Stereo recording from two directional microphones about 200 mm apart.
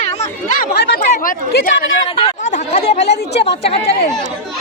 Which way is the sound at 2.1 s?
35° left (ahead or behind).